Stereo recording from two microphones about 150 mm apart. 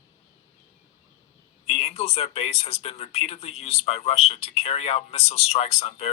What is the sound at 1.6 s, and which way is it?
Speech, 45° left (ahead or behind).